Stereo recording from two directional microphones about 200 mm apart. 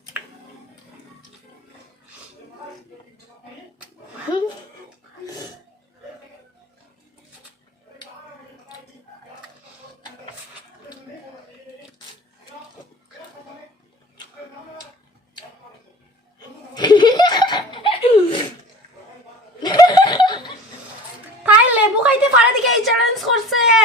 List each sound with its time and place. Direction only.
16.7 s laughter: 20° left (ahead or behind)
19.6 s laughter: 20° left (ahead or behind)
21.4 s a sound: 10° right (ahead or behind)